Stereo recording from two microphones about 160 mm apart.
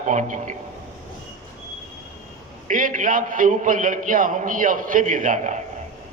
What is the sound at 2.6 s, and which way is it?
A man's voice, 55° right (ahead or behind).